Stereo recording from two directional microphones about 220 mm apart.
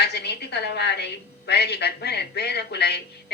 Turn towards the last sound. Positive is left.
turn(degrees=50)  # may be behind; listen again after turning